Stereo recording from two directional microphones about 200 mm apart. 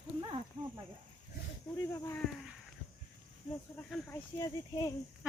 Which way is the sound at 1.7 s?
5° left (ahead or behind).